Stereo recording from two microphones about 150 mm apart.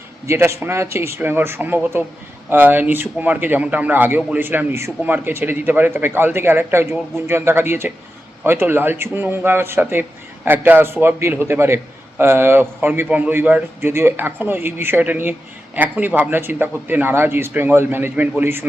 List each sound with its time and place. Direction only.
0.3 s a man's voice: 20° right (ahead or behind)